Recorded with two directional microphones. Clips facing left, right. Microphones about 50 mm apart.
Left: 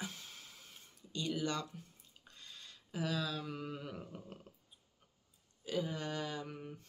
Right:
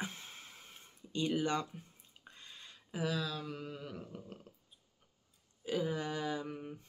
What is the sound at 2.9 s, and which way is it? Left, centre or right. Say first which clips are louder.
Speech: right 1 dB; centre.